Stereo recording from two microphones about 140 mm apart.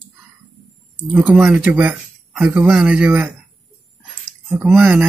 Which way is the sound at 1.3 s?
Centre (ahead or behind).